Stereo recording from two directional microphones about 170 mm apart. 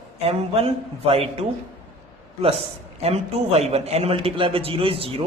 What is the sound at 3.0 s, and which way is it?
A man's voice, 40° right (ahead or behind).